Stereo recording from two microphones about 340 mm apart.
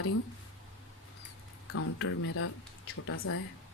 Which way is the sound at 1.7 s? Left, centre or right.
Left.